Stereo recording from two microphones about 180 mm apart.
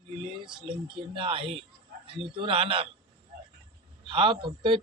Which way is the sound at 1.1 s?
30° right (ahead or behind).